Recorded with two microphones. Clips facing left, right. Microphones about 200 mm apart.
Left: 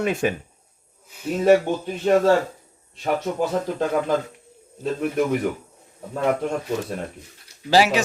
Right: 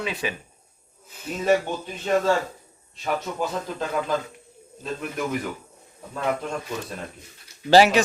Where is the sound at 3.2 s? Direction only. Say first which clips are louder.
Left 5 dB; 55° left (ahead or behind).